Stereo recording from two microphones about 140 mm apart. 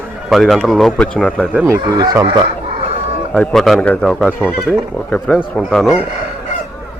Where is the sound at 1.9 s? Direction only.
30° right (ahead or behind).